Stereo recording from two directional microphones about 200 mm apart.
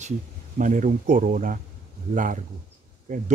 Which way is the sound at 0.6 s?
40° right (ahead or behind).